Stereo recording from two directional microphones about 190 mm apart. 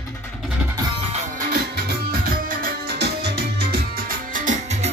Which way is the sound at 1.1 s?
50° right (ahead or behind).